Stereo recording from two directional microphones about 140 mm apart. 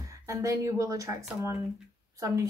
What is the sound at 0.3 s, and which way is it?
Speech, 20° right (ahead or behind).